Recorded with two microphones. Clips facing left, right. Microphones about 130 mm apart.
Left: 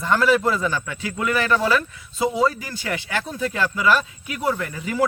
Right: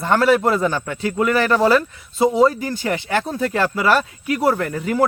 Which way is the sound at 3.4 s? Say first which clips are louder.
Right 4 dB; 60° right (ahead or behind).